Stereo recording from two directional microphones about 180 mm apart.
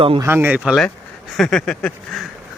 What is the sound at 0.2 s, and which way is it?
Speech, 15° right (ahead or behind).